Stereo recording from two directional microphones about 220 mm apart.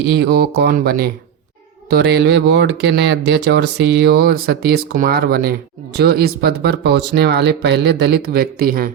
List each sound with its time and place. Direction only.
0.1 s speech: 50° right (ahead or behind)